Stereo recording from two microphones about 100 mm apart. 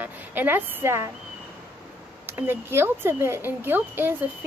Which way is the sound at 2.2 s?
25° right (ahead or behind).